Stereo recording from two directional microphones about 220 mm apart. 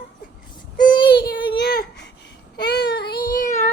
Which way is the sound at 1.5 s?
45° left (ahead or behind).